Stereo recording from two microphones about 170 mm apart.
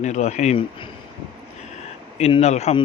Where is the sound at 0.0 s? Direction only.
45° left (ahead or behind).